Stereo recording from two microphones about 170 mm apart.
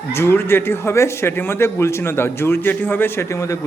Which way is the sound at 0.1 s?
15° left (ahead or behind).